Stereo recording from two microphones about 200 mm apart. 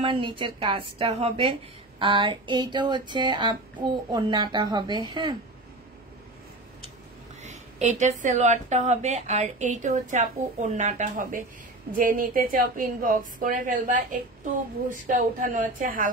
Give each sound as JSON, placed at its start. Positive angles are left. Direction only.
{"t": 0.0, "sound": "speech", "side_deg": -25}
{"t": 7.4, "sound": "a woman's voice", "side_deg": -35}